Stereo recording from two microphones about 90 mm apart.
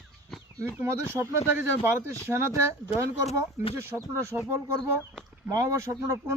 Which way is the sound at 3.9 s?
30° right (ahead or behind).